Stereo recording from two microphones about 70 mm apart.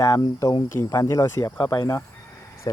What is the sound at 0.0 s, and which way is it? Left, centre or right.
Speech, left.